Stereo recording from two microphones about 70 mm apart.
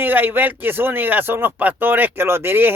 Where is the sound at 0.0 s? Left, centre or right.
Right.